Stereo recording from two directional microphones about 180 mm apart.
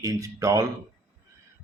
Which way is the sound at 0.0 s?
20° right (ahead or behind).